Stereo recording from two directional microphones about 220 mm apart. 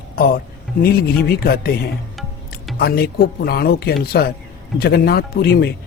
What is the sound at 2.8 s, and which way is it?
Speech, 45° left (ahead or behind).